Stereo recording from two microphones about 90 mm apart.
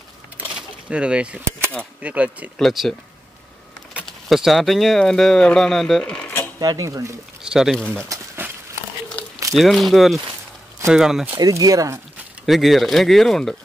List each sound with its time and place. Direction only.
0.6 s a sound: 10° right (ahead or behind)
2.0 s speech: 15° right (ahead or behind)
2.6 s speech: centre (ahead or behind)
4.3 s speech: centre (ahead or behind)
6.2 s a sound: 20° left (ahead or behind)
6.6 s speech: 45° right (ahead or behind)
7.4 s speech: 5° right (ahead or behind)
7.7 s speech: 15° left (ahead or behind)
8.4 s a sound: 20° right (ahead or behind)
9.5 s speech: centre (ahead or behind)
11.3 s speech: 45° right (ahead or behind)
12.4 s speech: centre (ahead or behind)